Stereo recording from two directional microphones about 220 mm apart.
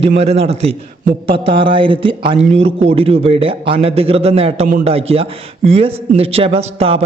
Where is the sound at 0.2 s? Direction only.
30° right (ahead or behind).